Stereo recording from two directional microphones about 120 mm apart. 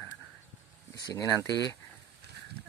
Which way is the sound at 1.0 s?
30° left (ahead or behind).